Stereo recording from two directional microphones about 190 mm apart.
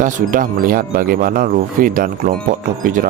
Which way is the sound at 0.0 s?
45° right (ahead or behind).